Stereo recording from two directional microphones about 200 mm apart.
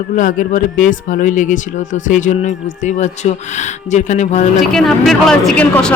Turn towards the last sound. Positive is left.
turn(degrees=5)  # may be behind; listen again after turning